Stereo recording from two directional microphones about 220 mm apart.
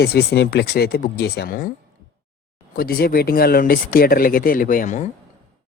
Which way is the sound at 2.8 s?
40° left (ahead or behind).